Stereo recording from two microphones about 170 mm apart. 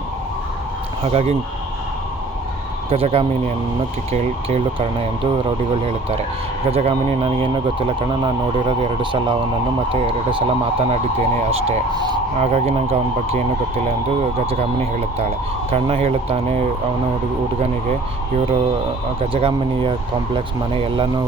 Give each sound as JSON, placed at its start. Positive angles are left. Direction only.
{"t": 1.0, "sound": "speech", "side_deg": -40}
{"t": 2.9, "sound": "speech", "side_deg": -35}
{"t": 18.3, "sound": "speech", "side_deg": -30}